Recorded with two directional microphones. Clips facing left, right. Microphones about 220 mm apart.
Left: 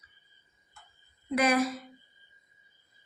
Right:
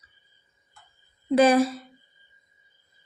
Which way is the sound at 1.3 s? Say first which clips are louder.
Right 8 dB; 30° right (ahead or behind).